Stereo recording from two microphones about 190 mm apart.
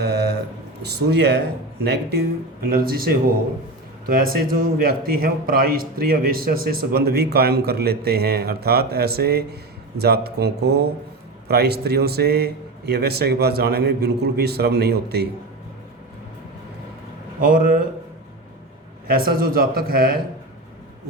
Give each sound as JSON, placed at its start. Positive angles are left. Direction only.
{"t": 0.0, "sound": "a sound", "side_deg": -60}
{"t": 0.9, "sound": "a man's voice", "side_deg": -60}
{"t": 17.4, "sound": "a man's voice", "side_deg": -45}
{"t": 19.0, "sound": "a man's voice", "side_deg": -50}